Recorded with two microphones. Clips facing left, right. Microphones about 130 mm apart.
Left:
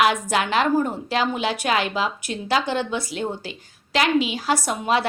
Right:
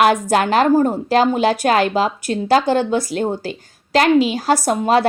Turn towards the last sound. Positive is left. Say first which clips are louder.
# right 7 dB
turn(degrees=-40)  # may be behind; listen again after turning